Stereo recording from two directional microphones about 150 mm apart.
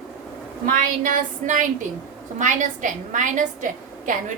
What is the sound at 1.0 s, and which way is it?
A woman's voice, 60° right (ahead or behind).